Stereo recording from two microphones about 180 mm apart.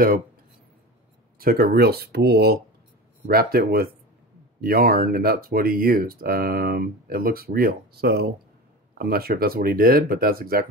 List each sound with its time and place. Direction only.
1.4 s speech: 55° right (ahead or behind)